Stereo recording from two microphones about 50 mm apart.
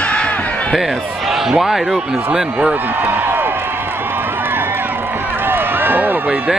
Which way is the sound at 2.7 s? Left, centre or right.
Right.